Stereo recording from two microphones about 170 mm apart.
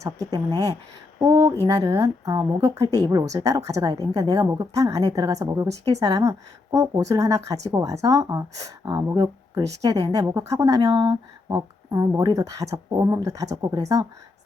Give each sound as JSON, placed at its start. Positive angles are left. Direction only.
{"t": 0.0, "sound": "a woman's voice", "side_deg": -20}